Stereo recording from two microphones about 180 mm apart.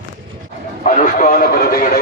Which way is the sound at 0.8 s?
45° left (ahead or behind).